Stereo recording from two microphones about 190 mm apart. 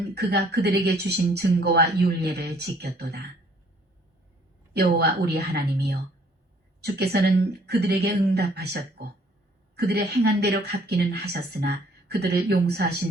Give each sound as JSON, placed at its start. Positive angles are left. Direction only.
{"t": 0.1, "sound": "speech", "side_deg": -60}
{"t": 4.7, "sound": "speech", "side_deg": -60}